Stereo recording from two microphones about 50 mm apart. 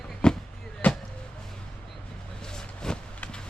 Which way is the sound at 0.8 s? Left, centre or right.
Left.